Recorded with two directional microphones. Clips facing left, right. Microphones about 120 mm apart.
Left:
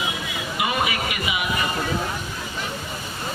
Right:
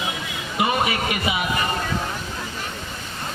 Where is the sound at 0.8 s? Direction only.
35° right (ahead or behind).